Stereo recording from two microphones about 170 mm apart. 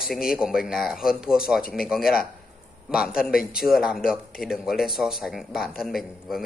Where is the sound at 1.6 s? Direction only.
60° left (ahead or behind).